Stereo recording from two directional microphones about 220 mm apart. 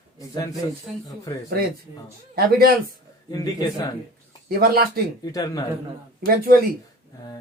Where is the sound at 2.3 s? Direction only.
45° right (ahead or behind).